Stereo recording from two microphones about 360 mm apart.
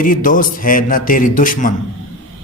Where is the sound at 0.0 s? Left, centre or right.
Left.